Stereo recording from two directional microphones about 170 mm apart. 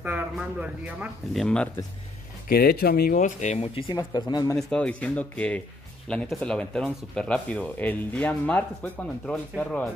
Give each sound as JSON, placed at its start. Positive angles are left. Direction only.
{"t": 0.0, "sound": "speech", "side_deg": -10}
{"t": 1.4, "sound": "speech", "side_deg": 5}
{"t": 2.4, "sound": "speech", "side_deg": 65}
{"t": 3.9, "sound": "speech", "side_deg": 25}
{"t": 4.6, "sound": "speech", "side_deg": 5}